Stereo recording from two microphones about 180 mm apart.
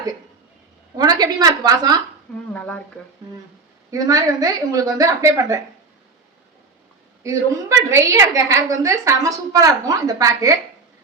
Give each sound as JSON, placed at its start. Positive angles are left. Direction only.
{"t": 0.9, "sound": "a woman's voice", "side_deg": -20}
{"t": 2.5, "sound": "speech", "side_deg": 5}
{"t": 3.9, "sound": "a woman's voice", "side_deg": -20}
{"t": 7.2, "sound": "a woman's voice", "side_deg": -15}